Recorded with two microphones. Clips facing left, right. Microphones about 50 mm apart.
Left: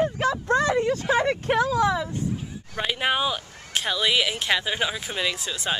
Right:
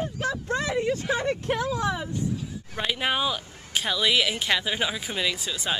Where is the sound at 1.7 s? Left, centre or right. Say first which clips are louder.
Left 5 dB; left.